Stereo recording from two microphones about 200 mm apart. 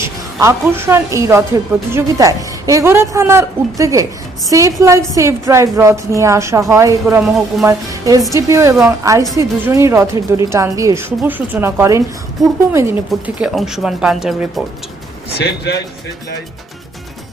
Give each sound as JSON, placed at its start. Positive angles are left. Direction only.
{"t": 0.0, "sound": "a woman's voice", "side_deg": -15}
{"t": 15.4, "sound": "speech", "side_deg": 55}